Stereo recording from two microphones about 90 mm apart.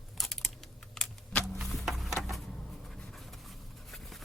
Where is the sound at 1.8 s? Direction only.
Centre (ahead or behind).